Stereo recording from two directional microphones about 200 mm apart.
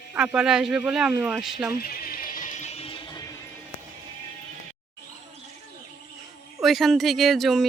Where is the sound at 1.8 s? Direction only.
45° left (ahead or behind); by 3.4 s 20° left (ahead or behind).